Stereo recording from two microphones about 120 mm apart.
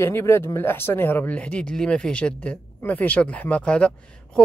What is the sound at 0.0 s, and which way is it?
Speech, 20° left (ahead or behind).